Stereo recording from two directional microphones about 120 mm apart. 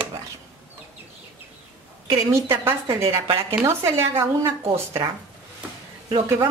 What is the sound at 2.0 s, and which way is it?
Speech, 20° right (ahead or behind).